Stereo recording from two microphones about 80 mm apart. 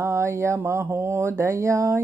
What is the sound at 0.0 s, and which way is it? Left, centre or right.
Speech, right.